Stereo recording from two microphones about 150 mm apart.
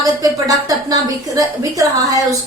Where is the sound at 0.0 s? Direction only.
25° right (ahead or behind).